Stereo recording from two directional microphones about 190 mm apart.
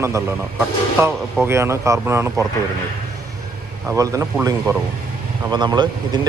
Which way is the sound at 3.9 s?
15° right (ahead or behind).